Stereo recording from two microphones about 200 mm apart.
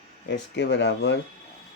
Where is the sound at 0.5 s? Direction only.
60° left (ahead or behind).